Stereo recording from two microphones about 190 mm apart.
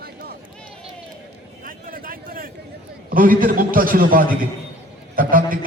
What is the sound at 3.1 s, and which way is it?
A man's voice, 45° right (ahead or behind).